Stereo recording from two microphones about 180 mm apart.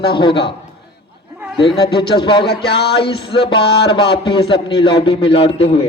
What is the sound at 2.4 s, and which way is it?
Speech, 65° left (ahead or behind).